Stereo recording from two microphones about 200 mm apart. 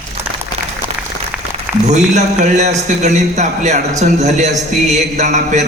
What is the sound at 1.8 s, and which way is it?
A man's voice, 35° right (ahead or behind).